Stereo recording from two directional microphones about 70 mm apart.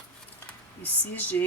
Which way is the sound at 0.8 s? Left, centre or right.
Left.